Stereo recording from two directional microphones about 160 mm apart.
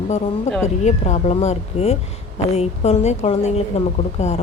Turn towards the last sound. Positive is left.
turn(degrees=45)  # may be behind; listen again after turning